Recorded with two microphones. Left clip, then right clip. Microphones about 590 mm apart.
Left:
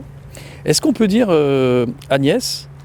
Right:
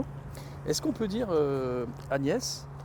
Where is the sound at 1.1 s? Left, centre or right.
Left.